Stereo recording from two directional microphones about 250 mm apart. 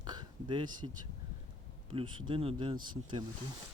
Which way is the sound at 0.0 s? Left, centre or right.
Centre.